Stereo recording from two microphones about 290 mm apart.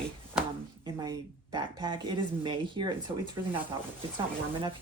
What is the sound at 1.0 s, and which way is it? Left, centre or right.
A woman's voice, centre.